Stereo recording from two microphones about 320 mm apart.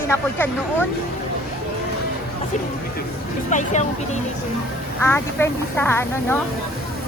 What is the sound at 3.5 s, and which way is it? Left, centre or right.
Speech, left.